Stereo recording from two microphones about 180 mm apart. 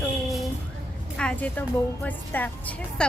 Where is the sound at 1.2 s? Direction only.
5° left (ahead or behind).